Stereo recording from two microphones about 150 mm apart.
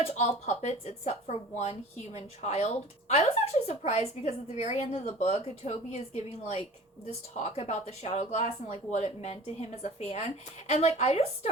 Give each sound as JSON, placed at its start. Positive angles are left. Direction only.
{"t": 0.0, "sound": "speech", "side_deg": 45}